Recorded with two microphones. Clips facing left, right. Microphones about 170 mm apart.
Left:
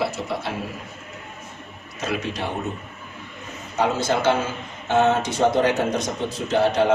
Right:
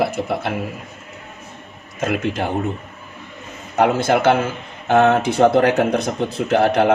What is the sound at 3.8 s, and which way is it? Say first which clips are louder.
Speech: right 6 dB; 60° right (ahead or behind).